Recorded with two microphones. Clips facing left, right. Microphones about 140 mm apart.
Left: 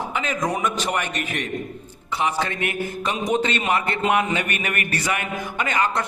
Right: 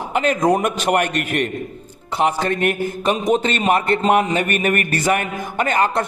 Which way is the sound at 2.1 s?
50° right (ahead or behind).